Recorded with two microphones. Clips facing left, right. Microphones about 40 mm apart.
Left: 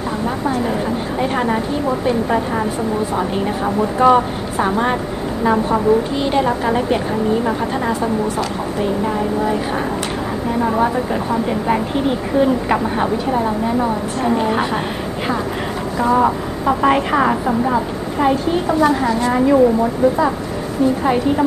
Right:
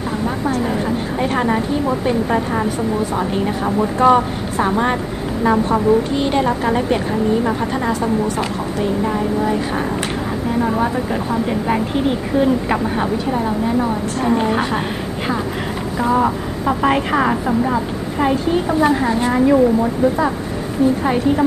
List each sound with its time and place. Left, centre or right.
1.2 s a woman's voice: centre
12.4 s a woman's voice: centre
16.0 s a woman's voice: centre
18.8 s a woman's voice: centre
19.3 s a woman's voice: centre